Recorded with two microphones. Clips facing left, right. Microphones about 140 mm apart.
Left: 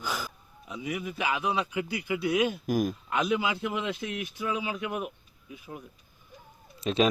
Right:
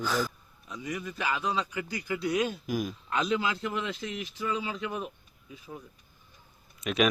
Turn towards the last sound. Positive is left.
turn(degrees=30)  # may be behind; listen again after turning